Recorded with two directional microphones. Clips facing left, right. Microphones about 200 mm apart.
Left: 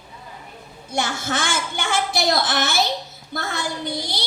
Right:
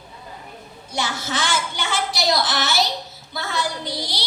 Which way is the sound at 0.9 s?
50° left (ahead or behind).